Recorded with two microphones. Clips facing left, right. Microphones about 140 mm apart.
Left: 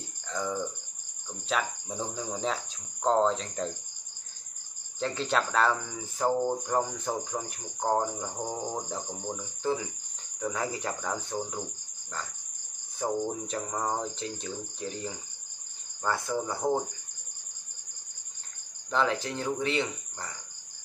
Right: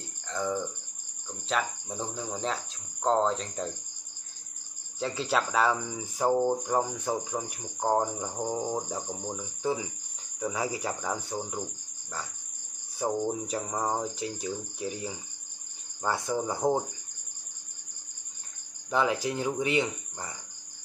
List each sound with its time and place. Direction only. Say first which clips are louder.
0.3 s cricket: right 1 dB; centre (ahead or behind)
5.0 s speech: even; 5° right (ahead or behind)
13.0 s speech: right 1 dB; 10° right (ahead or behind)
18.9 s speech: right 1 dB; 10° right (ahead or behind)